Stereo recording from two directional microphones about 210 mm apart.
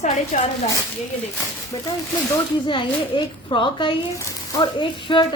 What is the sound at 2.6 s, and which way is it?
A woman's voice, 25° left (ahead or behind).